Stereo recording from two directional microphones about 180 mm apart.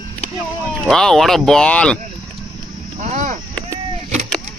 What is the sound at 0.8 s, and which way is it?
Speech, centre (ahead or behind).